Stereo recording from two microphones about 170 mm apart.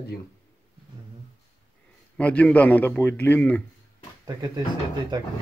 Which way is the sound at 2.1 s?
5° left (ahead or behind).